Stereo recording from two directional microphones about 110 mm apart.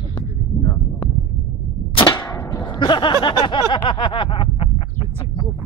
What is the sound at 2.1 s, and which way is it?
Arrow, 35° left (ahead or behind).